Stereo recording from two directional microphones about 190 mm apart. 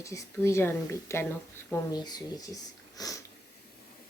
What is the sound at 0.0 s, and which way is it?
Speech, 15° left (ahead or behind).